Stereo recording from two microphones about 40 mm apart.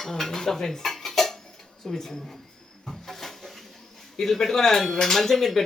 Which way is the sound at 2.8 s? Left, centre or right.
Centre.